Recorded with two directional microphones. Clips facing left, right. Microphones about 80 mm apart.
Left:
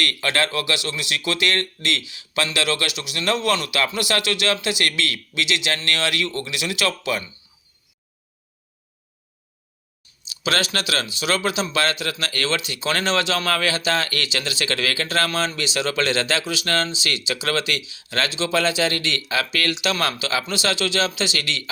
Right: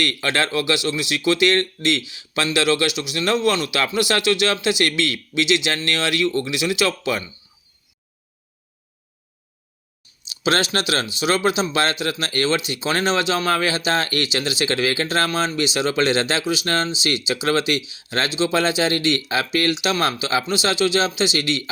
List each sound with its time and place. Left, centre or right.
0.0 s speech: right
10.2 s speech: right